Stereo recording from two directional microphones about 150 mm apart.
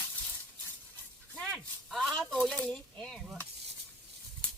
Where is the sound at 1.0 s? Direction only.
5° left (ahead or behind).